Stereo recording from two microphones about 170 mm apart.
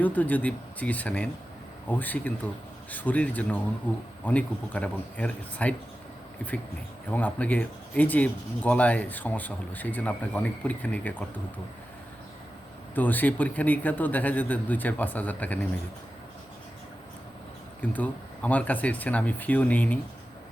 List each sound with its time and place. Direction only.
0.0 s speech: 10° left (ahead or behind)
12.9 s speech: 10° left (ahead or behind)
17.7 s speech: 10° left (ahead or behind)